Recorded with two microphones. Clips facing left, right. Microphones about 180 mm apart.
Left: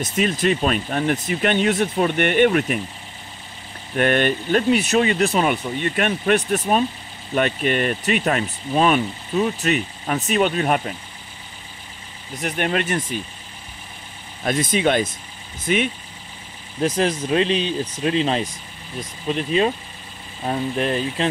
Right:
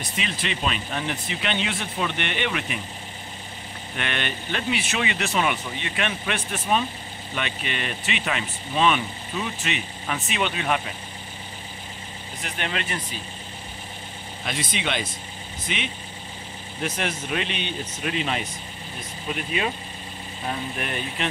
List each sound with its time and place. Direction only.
0.0 s speech: 45° left (ahead or behind)
3.9 s speech: 45° left (ahead or behind)
12.4 s speech: 45° left (ahead or behind)
14.4 s speech: 45° left (ahead or behind)
16.8 s speech: 35° left (ahead or behind)